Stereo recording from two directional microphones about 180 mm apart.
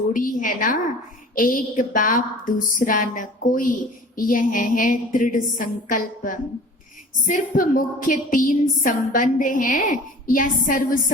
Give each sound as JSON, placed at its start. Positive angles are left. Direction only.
{"t": 0.1, "sound": "a woman's voice", "side_deg": 50}